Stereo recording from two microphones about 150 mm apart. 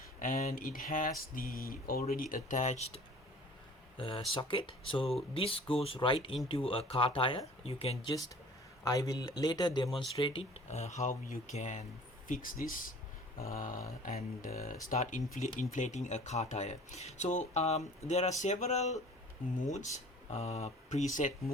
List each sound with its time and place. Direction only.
0.2 s speech: 70° left (ahead or behind); by 8.1 s 40° left (ahead or behind)
8.8 s speech: 25° left (ahead or behind); by 11.9 s 55° left (ahead or behind)
12.3 s speech: 65° left (ahead or behind)